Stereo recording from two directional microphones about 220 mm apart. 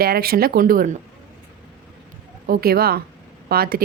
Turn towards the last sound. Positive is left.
turn(degrees=-45)  # may be behind; listen again after turning